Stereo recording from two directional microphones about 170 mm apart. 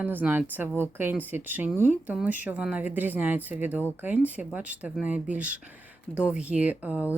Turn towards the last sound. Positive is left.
turn(degrees=-10)  # may be behind; listen again after turning